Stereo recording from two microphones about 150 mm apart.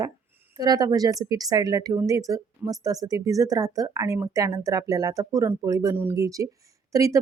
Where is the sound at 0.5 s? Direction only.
25° right (ahead or behind).